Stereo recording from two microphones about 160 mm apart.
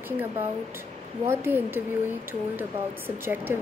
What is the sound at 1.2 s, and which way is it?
A woman's voice, 15° right (ahead or behind).